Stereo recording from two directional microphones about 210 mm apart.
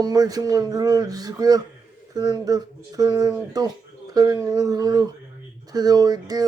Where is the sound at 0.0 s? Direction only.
20° right (ahead or behind).